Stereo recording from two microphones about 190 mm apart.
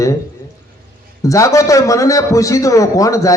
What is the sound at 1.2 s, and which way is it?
A man's voice, 15° left (ahead or behind).